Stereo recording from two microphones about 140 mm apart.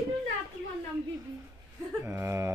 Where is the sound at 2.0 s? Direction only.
20° right (ahead or behind).